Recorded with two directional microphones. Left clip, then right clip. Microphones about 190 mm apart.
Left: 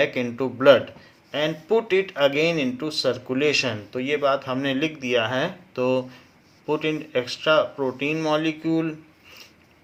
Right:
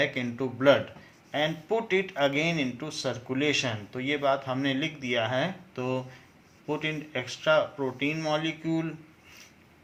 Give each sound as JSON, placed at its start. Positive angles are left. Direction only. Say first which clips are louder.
{"t": 0.0, "sound": "speech", "louder": "left 6 dB", "side_deg": 45}